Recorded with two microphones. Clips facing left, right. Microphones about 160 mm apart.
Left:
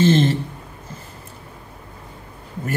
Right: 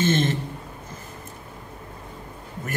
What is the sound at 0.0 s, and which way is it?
Speech, 30° left (ahead or behind).